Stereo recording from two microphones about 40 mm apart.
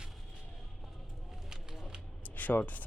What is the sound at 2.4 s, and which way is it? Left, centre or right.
Speech, left.